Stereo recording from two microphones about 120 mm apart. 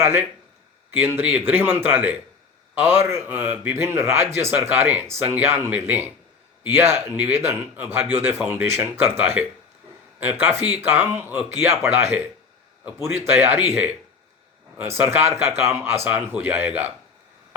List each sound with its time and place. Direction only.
0.0 s speech: 20° right (ahead or behind)